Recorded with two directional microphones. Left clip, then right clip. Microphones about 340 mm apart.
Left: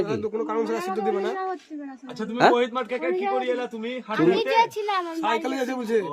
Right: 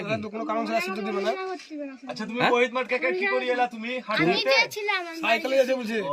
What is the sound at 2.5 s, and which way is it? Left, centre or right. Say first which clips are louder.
A man's voice: right 1 dB; centre.